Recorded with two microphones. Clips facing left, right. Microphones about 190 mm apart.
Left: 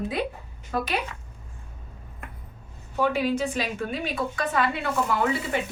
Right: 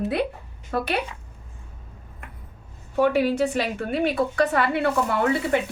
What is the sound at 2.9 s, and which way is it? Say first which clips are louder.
A woman's voice: right 4 dB; 60° right (ahead or behind).